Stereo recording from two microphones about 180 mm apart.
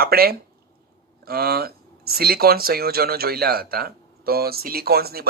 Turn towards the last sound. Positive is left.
turn(degrees=-60)  # may be behind; listen again after turning